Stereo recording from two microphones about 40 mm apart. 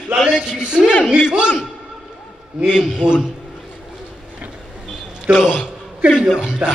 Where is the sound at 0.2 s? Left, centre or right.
Centre.